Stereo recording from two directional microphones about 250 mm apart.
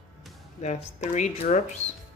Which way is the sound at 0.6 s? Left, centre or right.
Left.